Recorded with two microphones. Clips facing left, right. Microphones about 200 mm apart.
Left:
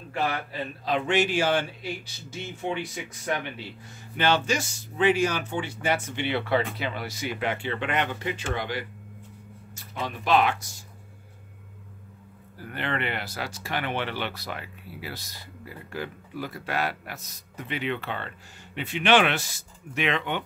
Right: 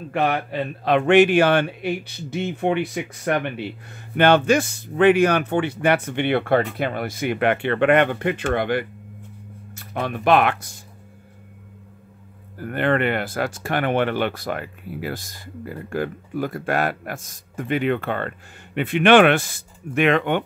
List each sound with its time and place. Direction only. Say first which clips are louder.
0.1 s speech: right 7 dB; 65° right (ahead or behind)
12.5 s speech: right 10 dB; 50° right (ahead or behind)